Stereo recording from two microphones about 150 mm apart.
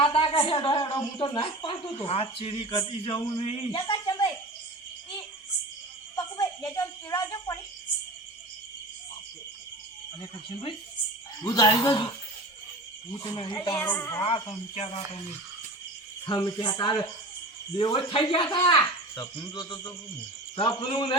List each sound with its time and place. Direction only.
0.0 s a woman's voice: 35° left (ahead or behind)
6.6 s speech: 15° left (ahead or behind)
7.3 s cricket: 20° left (ahead or behind)
10.2 s a woman's voice: 35° left (ahead or behind)
11.4 s insect: 25° left (ahead or behind)
13.3 s a woman's voice: 35° left (ahead or behind)
13.7 s a woman's voice: 15° left (ahead or behind)
14.2 s insect: 30° left (ahead or behind)
14.8 s speech: 45° left (ahead or behind)
16.2 s a woman's voice: 30° left (ahead or behind)
19.1 s insect: 25° left (ahead or behind)
20.6 s a woman's voice: 35° left (ahead or behind)